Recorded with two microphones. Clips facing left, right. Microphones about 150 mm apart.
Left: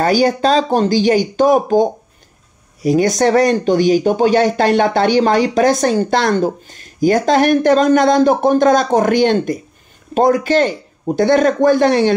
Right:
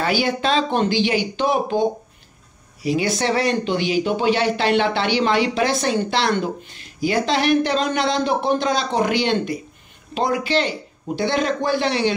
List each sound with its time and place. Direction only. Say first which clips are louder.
0.0 s speech: left 7 dB; 40° left (ahead or behind)